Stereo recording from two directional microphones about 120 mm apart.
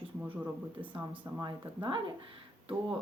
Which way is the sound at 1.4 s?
40° right (ahead or behind).